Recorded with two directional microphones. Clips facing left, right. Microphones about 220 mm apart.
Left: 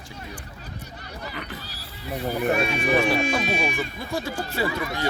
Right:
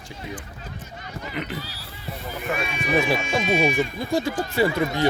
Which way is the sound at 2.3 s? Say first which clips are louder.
Left 6 dB; 35° left (ahead or behind).